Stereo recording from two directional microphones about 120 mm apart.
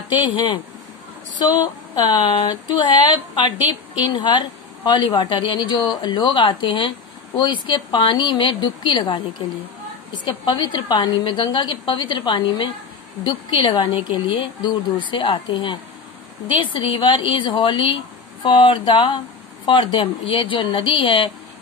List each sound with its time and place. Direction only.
0.1 s a woman's voice: 40° left (ahead or behind)
2.2 s a woman's voice: 40° left (ahead or behind)
4.0 s a woman's voice: 40° left (ahead or behind)